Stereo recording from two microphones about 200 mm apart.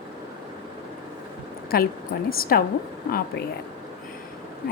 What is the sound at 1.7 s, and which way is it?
Speech, 50° left (ahead or behind).